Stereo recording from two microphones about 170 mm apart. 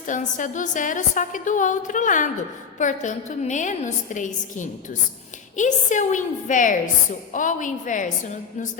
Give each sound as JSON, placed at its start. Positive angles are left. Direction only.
{"t": 0.0, "sound": "a woman's voice", "side_deg": 50}